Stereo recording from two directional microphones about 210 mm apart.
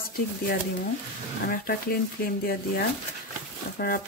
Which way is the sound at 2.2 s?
45° left (ahead or behind).